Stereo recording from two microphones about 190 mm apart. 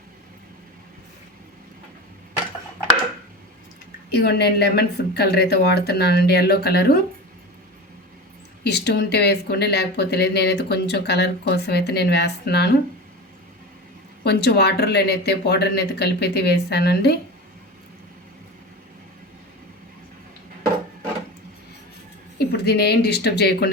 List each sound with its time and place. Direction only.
4.2 s speech: 60° left (ahead or behind)
8.6 s speech: 60° left (ahead or behind)
14.3 s speech: 60° left (ahead or behind)
22.4 s speech: 60° left (ahead or behind)